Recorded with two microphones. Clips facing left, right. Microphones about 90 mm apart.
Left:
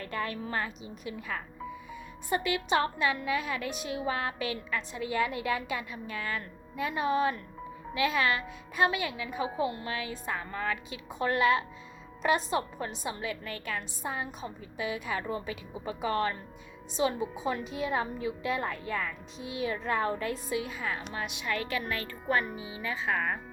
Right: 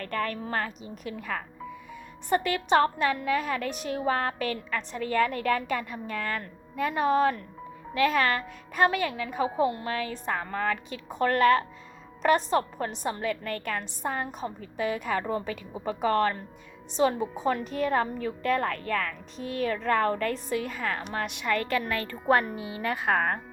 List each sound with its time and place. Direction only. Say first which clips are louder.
0.0 s a woman's voice: right 4 dB; 50° right (ahead or behind)
2.3 s a woman's voice: right 5 dB; 50° right (ahead or behind)
10.2 s a woman's voice: right 4 dB; 60° right (ahead or behind)
19.5 s a woman's voice: right 5 dB; 55° right (ahead or behind)
20.7 s speech: right 4 dB; 70° right (ahead or behind)
22.5 s a woman's voice: right 5 dB; centre (ahead or behind)
22.8 s speech: right 5 dB; 70° right (ahead or behind)